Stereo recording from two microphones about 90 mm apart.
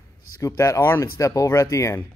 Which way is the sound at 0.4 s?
35° left (ahead or behind).